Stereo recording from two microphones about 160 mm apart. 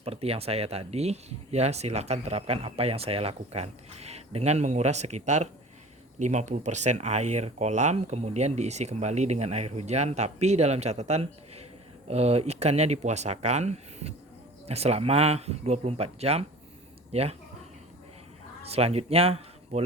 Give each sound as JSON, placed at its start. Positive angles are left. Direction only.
{"t": 0.0, "sound": "speech", "side_deg": -40}
{"t": 18.6, "sound": "speech", "side_deg": -40}